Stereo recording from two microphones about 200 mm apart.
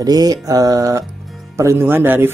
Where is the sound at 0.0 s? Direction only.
20° right (ahead or behind).